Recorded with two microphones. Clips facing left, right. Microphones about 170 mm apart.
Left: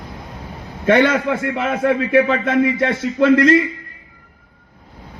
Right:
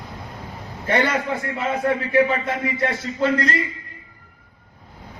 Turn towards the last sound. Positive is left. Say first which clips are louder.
# left 9 dB
turn(degrees=70)  # may be behind; listen again after turning